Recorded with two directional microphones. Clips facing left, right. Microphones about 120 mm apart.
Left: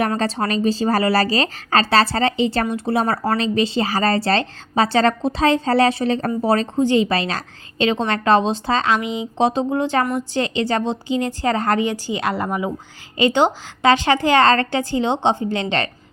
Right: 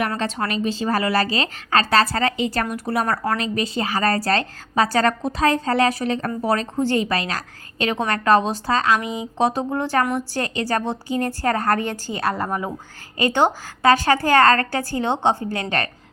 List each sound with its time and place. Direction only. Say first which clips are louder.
0.2 s a woman's voice: left 3 dB; 35° left (ahead or behind)
6.7 s a woman's voice: left 5 dB; 20° left (ahead or behind)
7.1 s a woman's voice: left 2 dB; 30° left (ahead or behind)